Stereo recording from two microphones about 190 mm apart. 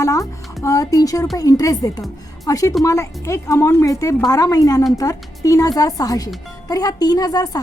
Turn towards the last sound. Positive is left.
turn(degrees=20)  # may be behind; listen again after turning